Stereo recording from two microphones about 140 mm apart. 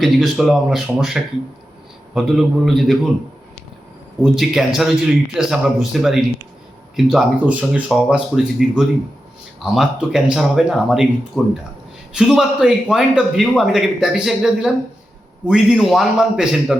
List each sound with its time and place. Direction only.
0.0 s a man's voice: centre (ahead or behind)
4.2 s a man's voice: centre (ahead or behind)